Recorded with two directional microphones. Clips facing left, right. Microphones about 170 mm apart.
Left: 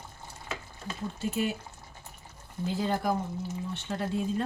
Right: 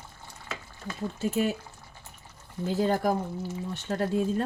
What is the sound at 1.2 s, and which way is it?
Speech, 45° right (ahead or behind).